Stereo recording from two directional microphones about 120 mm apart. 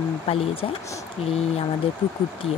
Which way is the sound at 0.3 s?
60° left (ahead or behind).